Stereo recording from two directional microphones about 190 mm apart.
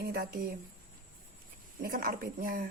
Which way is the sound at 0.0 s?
50° right (ahead or behind).